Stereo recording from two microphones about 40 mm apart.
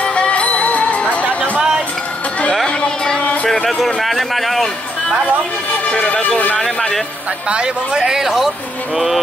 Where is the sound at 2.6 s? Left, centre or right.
Left.